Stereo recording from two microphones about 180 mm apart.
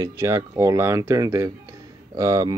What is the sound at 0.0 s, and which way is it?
Speech, 20° right (ahead or behind).